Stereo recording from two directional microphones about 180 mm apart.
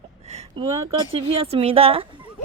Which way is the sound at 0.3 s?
40° right (ahead or behind).